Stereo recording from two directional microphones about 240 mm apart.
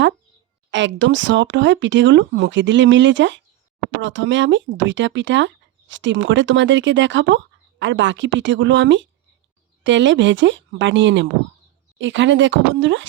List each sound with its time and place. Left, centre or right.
0.7 s speech: right